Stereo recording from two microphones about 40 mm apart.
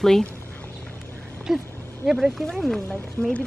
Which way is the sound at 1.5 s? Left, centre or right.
Centre.